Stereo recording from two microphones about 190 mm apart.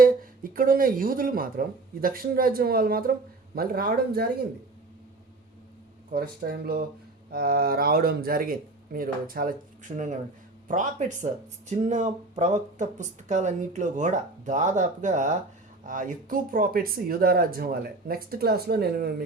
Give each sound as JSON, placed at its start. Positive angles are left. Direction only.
{"t": 0.5, "sound": "speech", "side_deg": -50}
{"t": 6.1, "sound": "speech", "side_deg": -50}